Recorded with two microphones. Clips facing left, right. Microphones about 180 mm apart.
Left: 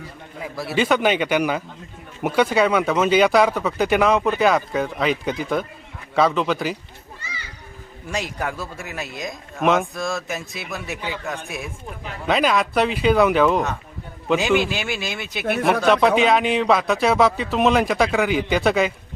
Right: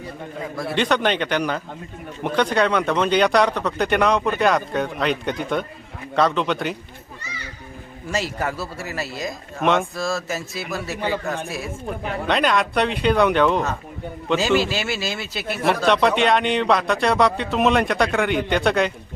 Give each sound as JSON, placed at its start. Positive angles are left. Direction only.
{"t": 0.5, "sound": "a man's voice", "side_deg": 5}
{"t": 8.1, "sound": "speech", "side_deg": 0}
{"t": 15.3, "sound": "a man's voice", "side_deg": 60}
{"t": 15.8, "sound": "speech", "side_deg": 0}